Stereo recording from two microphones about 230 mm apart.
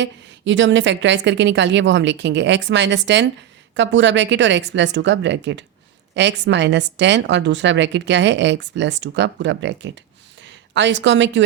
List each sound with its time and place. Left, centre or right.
0.0 s a woman's voice: right